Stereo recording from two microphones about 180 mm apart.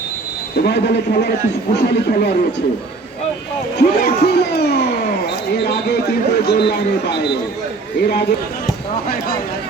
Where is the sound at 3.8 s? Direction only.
60° left (ahead or behind).